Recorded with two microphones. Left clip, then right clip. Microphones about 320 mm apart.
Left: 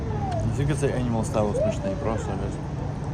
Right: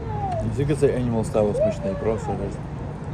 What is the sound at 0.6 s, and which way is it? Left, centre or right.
Speech, centre.